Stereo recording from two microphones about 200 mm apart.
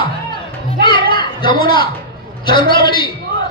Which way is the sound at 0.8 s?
25° left (ahead or behind).